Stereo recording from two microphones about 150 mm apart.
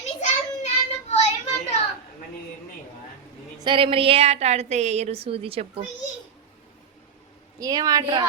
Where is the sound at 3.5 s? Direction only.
35° right (ahead or behind).